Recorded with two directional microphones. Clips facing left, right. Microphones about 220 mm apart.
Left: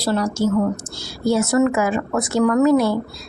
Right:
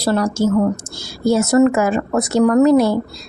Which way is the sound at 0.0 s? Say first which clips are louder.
Right 3 dB; 55° right (ahead or behind).